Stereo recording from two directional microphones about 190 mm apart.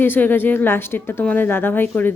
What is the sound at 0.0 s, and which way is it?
A woman's voice, 10° left (ahead or behind).